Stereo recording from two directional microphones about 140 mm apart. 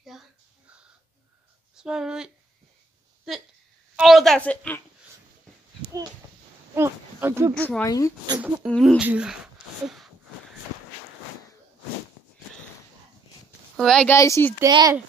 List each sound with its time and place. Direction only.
0.1 s a sound: centre (ahead or behind)
1.8 s speech: 5° right (ahead or behind)
3.9 s a woman's voice: centre (ahead or behind)
6.7 s speech: 15° right (ahead or behind)
7.5 s speech: 10° left (ahead or behind)
7.8 s speech: 25° left (ahead or behind)
8.6 s speech: centre (ahead or behind)
9.8 s a sound: 5° right (ahead or behind)
13.7 s speech: 5° left (ahead or behind)
14.0 s speech: 20° left (ahead or behind)
14.7 s speech: 30° right (ahead or behind)